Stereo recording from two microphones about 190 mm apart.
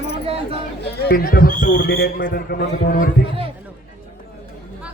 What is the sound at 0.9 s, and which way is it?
Speech, 55° left (ahead or behind).